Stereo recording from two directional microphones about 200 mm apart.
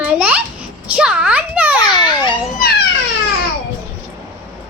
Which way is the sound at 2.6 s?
50° left (ahead or behind).